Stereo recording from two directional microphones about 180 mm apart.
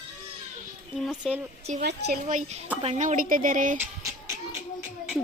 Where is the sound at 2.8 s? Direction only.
40° right (ahead or behind).